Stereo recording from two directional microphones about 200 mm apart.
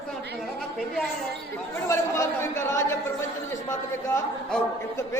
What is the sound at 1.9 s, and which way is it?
Speech, 15° left (ahead or behind).